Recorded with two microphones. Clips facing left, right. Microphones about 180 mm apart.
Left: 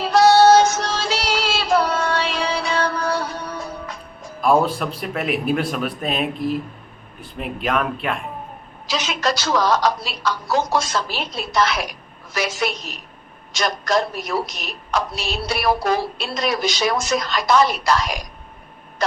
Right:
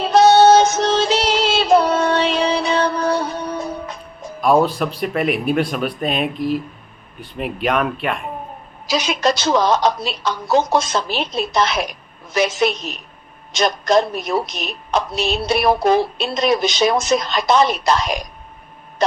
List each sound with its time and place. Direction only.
0.0 s music: 20° right (ahead or behind)
4.4 s a man's voice: centre (ahead or behind)
8.9 s a woman's voice: 15° right (ahead or behind)